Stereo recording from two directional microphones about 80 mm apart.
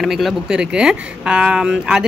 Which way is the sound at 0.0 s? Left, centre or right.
Centre.